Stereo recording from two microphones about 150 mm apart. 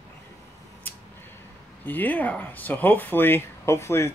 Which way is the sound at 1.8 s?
10° left (ahead or behind).